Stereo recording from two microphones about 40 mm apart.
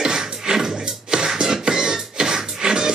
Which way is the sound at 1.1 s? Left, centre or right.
Centre.